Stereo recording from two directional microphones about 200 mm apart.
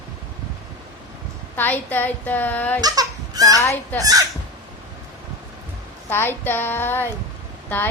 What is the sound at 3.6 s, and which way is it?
Speech, 15° left (ahead or behind).